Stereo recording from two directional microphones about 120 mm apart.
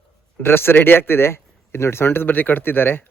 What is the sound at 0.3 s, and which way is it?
A man's voice, 20° left (ahead or behind).